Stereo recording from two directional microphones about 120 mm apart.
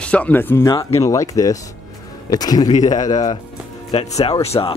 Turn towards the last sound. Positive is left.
turn(degrees=60)  # may be behind; listen again after turning